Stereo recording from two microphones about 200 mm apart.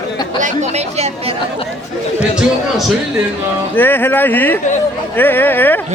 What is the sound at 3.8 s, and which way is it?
Speech, 10° left (ahead or behind).